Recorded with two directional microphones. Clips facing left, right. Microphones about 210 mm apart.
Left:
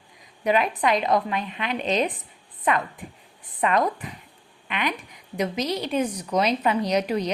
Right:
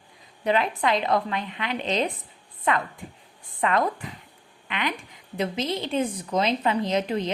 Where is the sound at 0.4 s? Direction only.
15° left (ahead or behind).